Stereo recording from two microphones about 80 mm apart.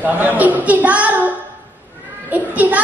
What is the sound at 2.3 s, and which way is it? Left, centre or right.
Children playing, centre.